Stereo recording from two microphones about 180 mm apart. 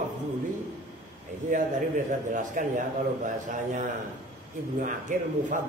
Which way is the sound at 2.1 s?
45° right (ahead or behind).